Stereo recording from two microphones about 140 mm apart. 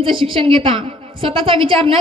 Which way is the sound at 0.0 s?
40° right (ahead or behind).